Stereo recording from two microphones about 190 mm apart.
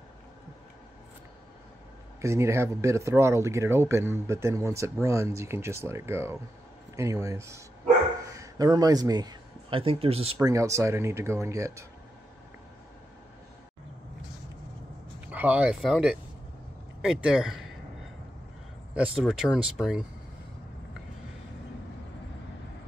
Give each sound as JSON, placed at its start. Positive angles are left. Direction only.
{"t": 2.2, "sound": "speech", "side_deg": -15}
{"t": 10.4, "sound": "speech", "side_deg": -15}
{"t": 15.1, "sound": "speech", "side_deg": -10}
{"t": 19.1, "sound": "speech", "side_deg": 0}